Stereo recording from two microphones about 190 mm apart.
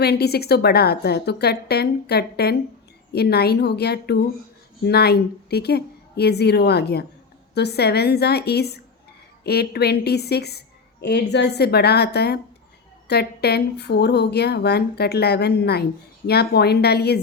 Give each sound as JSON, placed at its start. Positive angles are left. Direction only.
{"t": 0.0, "sound": "speech", "side_deg": 55}